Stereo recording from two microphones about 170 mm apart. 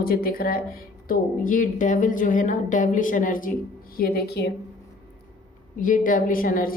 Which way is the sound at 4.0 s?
65° left (ahead or behind).